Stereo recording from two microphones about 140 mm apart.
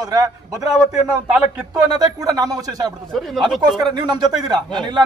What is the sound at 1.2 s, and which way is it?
Speech, 5° right (ahead or behind).